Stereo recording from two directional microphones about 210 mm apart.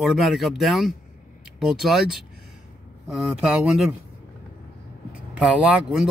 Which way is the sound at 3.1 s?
5° right (ahead or behind).